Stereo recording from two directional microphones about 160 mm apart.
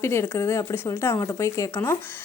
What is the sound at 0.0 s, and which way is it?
A woman's voice, 15° left (ahead or behind).